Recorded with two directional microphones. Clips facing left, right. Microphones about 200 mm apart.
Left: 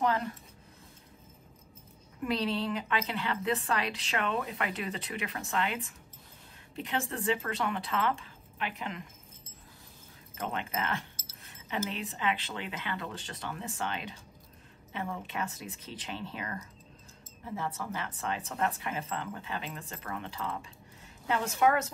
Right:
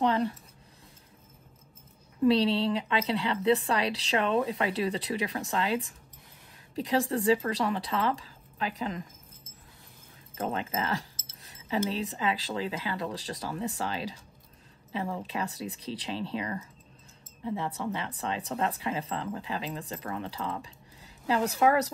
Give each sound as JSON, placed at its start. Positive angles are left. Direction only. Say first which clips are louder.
{"t": 0.0, "sound": "speech", "louder": "right 4 dB", "side_deg": -30}
{"t": 2.2, "sound": "speech", "louder": "right 7 dB", "side_deg": -30}
{"t": 10.3, "sound": "speech", "louder": "right 4 dB", "side_deg": -30}